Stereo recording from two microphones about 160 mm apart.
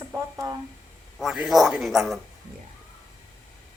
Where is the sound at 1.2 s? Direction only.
5° right (ahead or behind).